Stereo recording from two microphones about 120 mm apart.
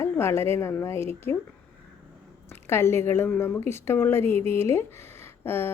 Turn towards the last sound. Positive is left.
turn(degrees=20)  # may be behind; listen again after turning